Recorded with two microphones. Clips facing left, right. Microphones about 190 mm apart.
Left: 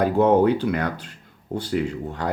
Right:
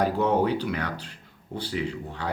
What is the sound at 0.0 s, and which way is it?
A man's voice, 50° left (ahead or behind).